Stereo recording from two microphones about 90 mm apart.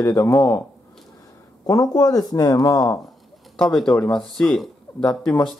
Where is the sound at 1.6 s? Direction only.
40° left (ahead or behind).